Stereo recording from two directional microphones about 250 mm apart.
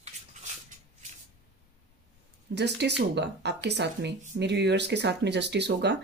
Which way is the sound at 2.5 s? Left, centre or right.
Right.